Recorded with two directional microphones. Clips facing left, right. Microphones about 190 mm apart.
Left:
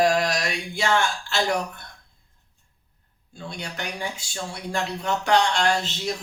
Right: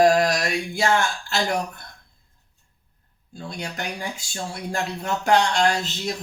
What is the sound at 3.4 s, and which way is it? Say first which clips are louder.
Speech: right 2 dB; 40° right (ahead or behind).